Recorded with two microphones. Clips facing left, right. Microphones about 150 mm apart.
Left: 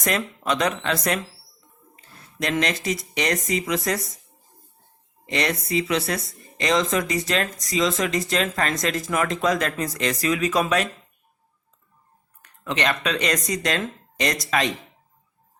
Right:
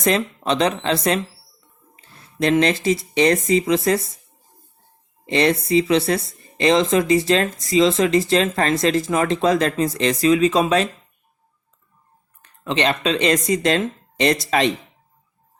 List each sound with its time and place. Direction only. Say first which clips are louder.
0.0 s speech: right 5 dB; 25° right (ahead or behind)
5.2 s speech: right 7 dB; 30° right (ahead or behind)
12.4 s speech: right 4 dB; 25° right (ahead or behind)